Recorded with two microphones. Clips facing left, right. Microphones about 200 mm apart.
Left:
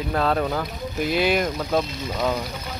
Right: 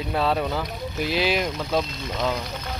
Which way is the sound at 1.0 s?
50° left (ahead or behind).